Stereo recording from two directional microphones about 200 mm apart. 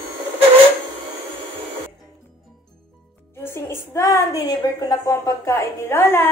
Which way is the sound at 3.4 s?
10° left (ahead or behind).